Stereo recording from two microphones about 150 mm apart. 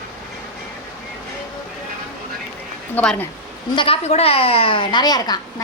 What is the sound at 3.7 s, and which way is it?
Speech, 40° left (ahead or behind).